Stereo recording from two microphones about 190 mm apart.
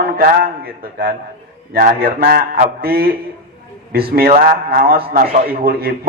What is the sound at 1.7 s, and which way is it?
A man's voice, 50° right (ahead or behind).